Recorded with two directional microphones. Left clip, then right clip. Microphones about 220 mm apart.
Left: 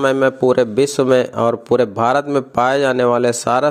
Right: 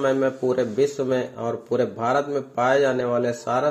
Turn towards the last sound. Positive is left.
turn(degrees=45)  # may be behind; listen again after turning